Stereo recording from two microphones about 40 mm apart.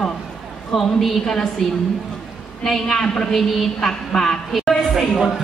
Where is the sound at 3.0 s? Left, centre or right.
Centre.